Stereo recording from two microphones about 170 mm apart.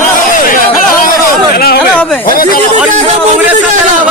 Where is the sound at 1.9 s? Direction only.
5° left (ahead or behind).